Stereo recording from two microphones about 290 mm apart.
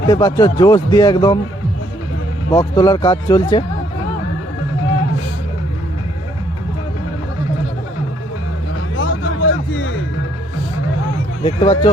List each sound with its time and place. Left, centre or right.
0.1 s speech: centre
2.5 s speech: centre
9.0 s music: left
11.4 s speech: centre